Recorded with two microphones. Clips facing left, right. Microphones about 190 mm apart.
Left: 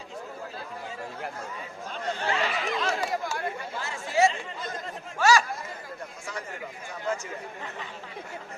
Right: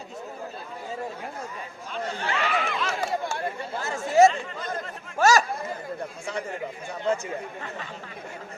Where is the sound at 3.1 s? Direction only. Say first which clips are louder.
Right 2 dB; 30° right (ahead or behind).